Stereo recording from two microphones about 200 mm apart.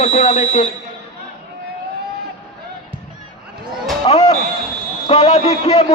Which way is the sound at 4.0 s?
30° left (ahead or behind).